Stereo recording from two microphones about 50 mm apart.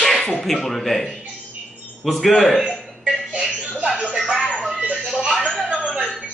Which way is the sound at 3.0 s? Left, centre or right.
Right.